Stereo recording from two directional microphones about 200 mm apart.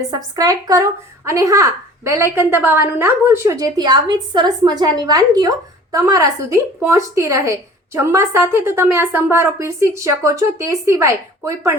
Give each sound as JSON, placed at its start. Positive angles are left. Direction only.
{"t": 0.1, "sound": "a woman's voice", "side_deg": -20}